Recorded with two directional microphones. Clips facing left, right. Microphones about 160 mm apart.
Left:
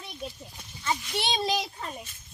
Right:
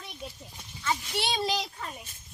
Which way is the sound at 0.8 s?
20° left (ahead or behind).